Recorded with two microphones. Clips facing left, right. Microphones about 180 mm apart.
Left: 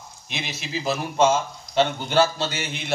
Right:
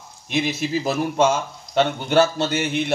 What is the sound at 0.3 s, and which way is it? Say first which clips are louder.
A man's voice: right 9 dB; 50° right (ahead or behind).